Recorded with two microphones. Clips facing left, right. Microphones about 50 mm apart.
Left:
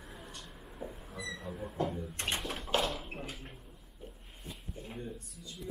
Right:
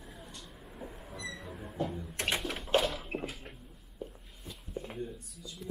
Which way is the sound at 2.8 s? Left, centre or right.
Centre.